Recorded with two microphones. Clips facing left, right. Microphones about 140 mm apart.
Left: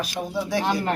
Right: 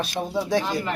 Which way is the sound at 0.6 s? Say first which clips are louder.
Left 3 dB; 55° left (ahead or behind).